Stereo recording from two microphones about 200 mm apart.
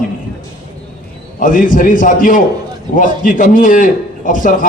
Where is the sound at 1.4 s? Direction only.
40° left (ahead or behind).